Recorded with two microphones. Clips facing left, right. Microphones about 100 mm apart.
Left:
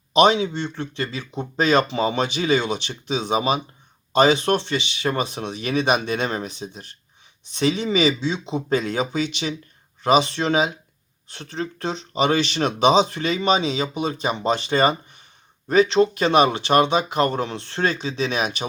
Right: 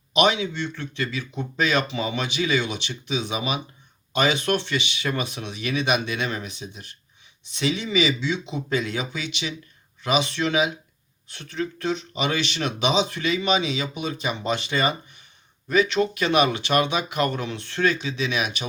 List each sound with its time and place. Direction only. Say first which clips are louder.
0.1 s speech: left 5 dB; 35° left (ahead or behind)